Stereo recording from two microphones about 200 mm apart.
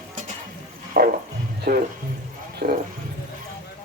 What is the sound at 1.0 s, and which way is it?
Music, 45° right (ahead or behind).